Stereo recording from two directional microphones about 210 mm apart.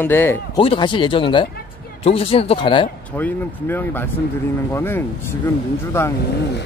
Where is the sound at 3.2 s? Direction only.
10° left (ahead or behind).